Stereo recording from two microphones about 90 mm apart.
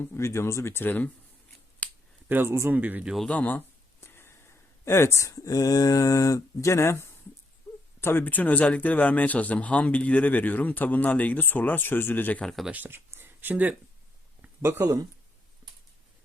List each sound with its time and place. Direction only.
0.0 s speech: 25° left (ahead or behind)
1.8 s finger snapping: 15° left (ahead or behind)
2.3 s speech: 30° right (ahead or behind)
3.2 s speech: 15° left (ahead or behind)
7.7 s a sound: 40° left (ahead or behind)
8.0 s speech: 20° left (ahead or behind)
12.5 s speech: centre (ahead or behind)
12.7 s speech: 20° right (ahead or behind)
13.1 s a sound: 25° right (ahead or behind)
14.6 s speech: 30° right (ahead or behind)